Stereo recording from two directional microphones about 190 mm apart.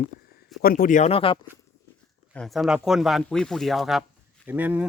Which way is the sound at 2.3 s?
Centre (ahead or behind).